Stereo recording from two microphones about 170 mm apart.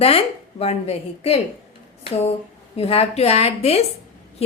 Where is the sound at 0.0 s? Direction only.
35° left (ahead or behind).